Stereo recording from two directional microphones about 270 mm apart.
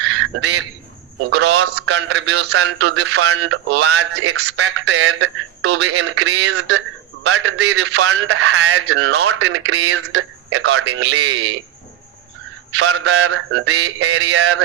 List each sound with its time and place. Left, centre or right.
0.0 s duck: right
1.3 s speech: right
12.7 s speech: right